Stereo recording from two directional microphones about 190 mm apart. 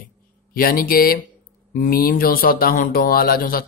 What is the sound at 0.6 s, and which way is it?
Speech, 50° left (ahead or behind).